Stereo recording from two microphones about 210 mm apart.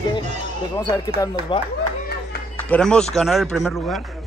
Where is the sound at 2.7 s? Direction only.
5° left (ahead or behind).